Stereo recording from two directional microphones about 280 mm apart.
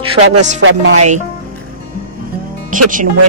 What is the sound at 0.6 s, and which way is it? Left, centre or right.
Speech, right.